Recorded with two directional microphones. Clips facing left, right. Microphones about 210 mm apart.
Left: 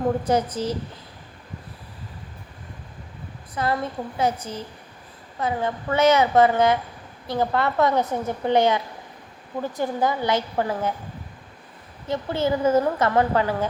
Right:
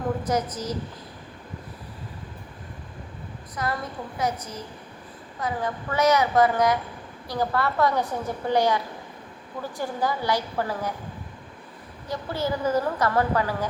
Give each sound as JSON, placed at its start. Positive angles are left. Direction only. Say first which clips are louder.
{"t": 0.3, "sound": "a woman's voice", "louder": "left 4 dB", "side_deg": 30}
{"t": 3.5, "sound": "a woman's voice", "louder": "left 5 dB", "side_deg": 30}
{"t": 12.0, "sound": "a woman's voice", "louder": "left 5 dB", "side_deg": 25}